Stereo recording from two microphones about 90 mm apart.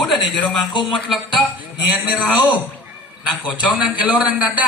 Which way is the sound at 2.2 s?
15° left (ahead or behind).